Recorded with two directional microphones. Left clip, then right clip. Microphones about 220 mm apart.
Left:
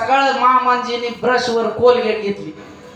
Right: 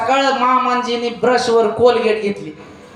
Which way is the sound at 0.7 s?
30° right (ahead or behind).